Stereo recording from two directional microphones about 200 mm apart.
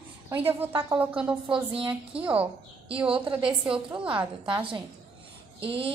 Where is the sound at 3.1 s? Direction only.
25° right (ahead or behind).